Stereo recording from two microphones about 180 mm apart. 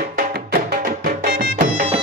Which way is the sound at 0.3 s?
60° right (ahead or behind).